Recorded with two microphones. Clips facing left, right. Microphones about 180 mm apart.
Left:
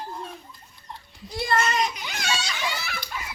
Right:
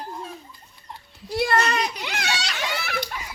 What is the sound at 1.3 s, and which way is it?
A child's voice, 65° right (ahead or behind).